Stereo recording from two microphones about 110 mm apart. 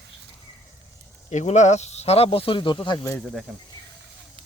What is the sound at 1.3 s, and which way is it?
Speech, 90° left.